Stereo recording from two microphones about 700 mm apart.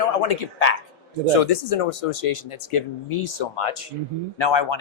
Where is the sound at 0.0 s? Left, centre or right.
Left.